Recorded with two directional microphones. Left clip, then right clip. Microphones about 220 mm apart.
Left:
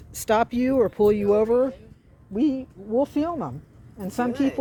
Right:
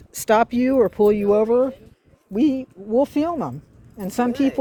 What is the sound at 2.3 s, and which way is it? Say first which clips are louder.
Speech: right 4 dB; 45° right (ahead or behind).